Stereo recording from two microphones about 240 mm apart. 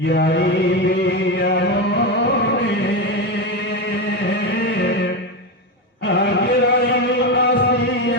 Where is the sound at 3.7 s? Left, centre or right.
Left.